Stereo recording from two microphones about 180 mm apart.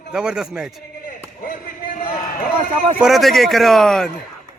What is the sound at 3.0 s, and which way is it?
Speech, centre (ahead or behind).